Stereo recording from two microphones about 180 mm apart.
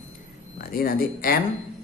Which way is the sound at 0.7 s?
55° left (ahead or behind).